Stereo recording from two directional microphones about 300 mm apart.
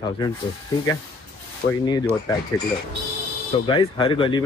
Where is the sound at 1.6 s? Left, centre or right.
Left.